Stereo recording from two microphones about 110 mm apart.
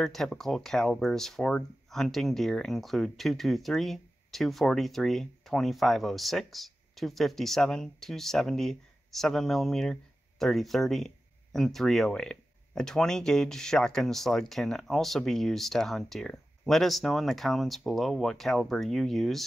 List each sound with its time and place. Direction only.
0.0 s speech: 5° left (ahead or behind)